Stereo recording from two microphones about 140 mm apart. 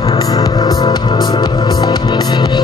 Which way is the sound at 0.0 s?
30° left (ahead or behind).